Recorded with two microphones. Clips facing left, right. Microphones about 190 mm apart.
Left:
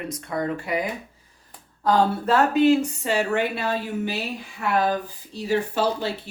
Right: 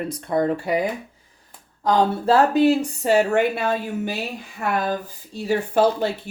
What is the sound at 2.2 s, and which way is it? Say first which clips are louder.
Speech: right 4 dB; 35° right (ahead or behind).